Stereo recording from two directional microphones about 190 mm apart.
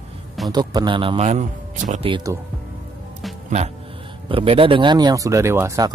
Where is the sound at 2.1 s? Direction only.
20° right (ahead or behind).